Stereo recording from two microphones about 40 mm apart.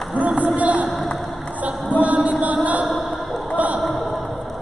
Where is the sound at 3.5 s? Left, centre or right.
Right.